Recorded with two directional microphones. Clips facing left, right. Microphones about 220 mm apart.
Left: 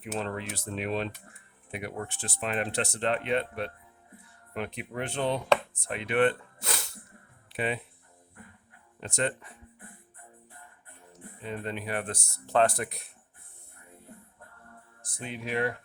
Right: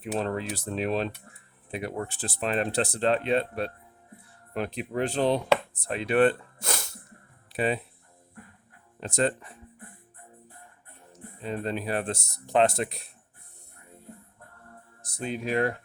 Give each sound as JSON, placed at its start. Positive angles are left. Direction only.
{"t": 0.0, "sound": "speech", "side_deg": -35}
{"t": 9.0, "sound": "speech", "side_deg": -35}
{"t": 11.4, "sound": "speech", "side_deg": -35}
{"t": 15.0, "sound": "speech", "side_deg": -40}